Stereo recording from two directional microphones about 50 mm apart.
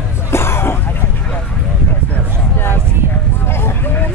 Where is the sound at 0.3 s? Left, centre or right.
Left.